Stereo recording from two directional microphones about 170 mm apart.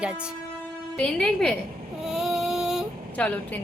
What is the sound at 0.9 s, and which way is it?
Speech, 5° left (ahead or behind).